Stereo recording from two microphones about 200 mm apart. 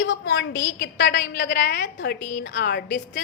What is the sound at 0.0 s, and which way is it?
A woman's voice, 70° left (ahead or behind).